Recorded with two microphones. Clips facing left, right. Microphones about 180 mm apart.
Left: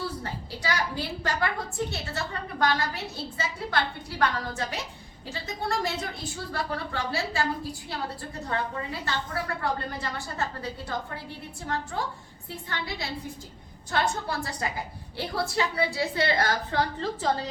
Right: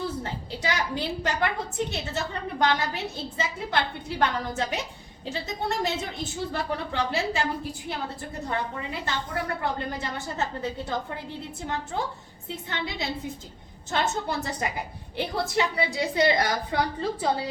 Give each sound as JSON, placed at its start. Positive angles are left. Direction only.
{"t": 0.2, "sound": "a woman's voice", "side_deg": -20}